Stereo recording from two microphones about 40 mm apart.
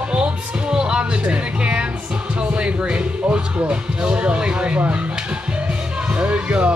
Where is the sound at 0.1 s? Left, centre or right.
Right.